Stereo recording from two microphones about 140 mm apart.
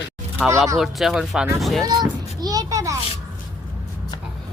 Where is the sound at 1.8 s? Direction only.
30° right (ahead or behind).